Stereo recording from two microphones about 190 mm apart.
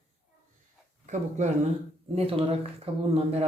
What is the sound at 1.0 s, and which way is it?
Speech, 40° right (ahead or behind).